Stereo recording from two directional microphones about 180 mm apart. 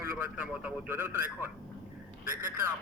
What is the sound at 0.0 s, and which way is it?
A man's voice, 10° right (ahead or behind).